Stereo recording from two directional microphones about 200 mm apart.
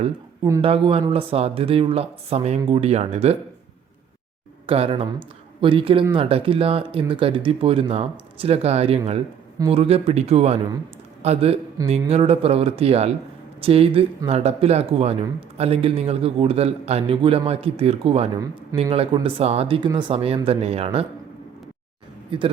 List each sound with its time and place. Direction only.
0.6 s a man's voice: 30° right (ahead or behind)
4.6 s a man's voice: 30° right (ahead or behind)
22.3 s speech: 25° right (ahead or behind)